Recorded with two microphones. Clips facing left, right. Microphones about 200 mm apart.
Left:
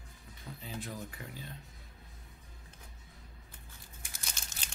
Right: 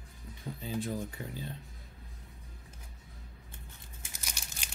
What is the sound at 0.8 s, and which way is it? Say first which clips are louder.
Speech: right 6 dB; 30° right (ahead or behind).